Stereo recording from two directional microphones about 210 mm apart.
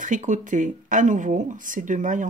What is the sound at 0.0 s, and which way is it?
Speech, 35° right (ahead or behind).